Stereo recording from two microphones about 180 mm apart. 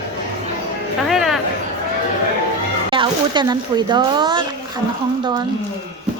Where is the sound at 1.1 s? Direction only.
Centre (ahead or behind).